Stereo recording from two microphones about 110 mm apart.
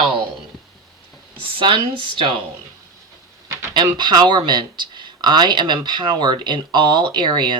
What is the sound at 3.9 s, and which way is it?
Speech, 40° right (ahead or behind).